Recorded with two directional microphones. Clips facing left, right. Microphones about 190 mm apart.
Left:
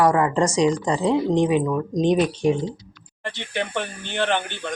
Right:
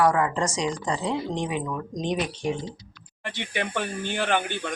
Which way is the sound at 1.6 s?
35° left (ahead or behind).